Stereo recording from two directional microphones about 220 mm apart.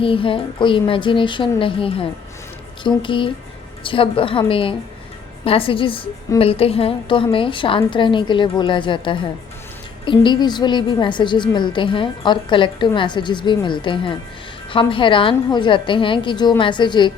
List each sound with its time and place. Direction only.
0.0 s a woman's voice: 25° left (ahead or behind)